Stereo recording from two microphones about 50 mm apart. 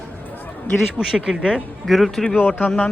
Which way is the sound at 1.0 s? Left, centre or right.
Centre.